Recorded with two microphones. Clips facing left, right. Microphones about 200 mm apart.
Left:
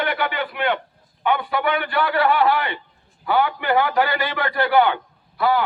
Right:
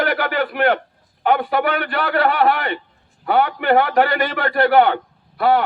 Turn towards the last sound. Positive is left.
turn(degrees=-60)  # may be behind; listen again after turning